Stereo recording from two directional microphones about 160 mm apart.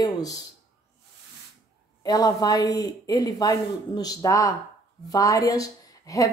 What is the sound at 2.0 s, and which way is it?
A woman's voice, 25° left (ahead or behind).